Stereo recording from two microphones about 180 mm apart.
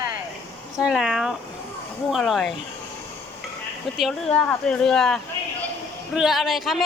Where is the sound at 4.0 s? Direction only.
5° left (ahead or behind).